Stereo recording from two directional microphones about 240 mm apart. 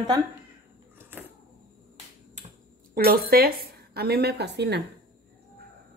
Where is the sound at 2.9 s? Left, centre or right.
Right.